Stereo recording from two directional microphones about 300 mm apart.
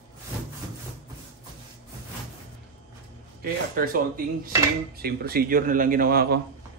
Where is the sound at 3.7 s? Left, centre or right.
Right.